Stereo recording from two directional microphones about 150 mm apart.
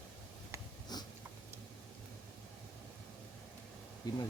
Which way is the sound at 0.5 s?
20° right (ahead or behind).